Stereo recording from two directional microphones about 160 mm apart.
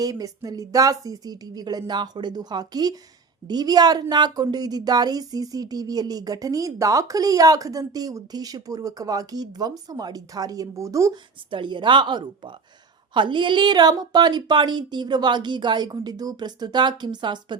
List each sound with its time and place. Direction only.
0.0 s speech: 20° right (ahead or behind)
11.5 s speech: 30° right (ahead or behind)